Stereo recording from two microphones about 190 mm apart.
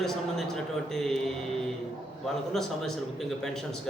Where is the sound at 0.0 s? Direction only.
Centre (ahead or behind).